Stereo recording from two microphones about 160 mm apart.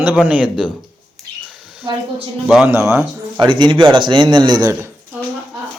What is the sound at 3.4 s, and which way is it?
A man's voice, 30° right (ahead or behind).